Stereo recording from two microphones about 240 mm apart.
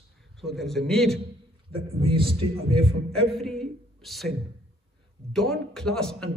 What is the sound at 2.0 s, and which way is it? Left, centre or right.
Speech, right.